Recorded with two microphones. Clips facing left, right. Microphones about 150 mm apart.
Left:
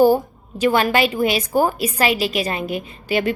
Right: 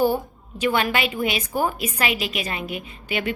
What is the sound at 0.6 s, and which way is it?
A woman's voice, 40° left (ahead or behind).